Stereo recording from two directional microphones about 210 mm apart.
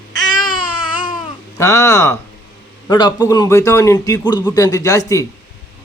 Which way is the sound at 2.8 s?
20° left (ahead or behind).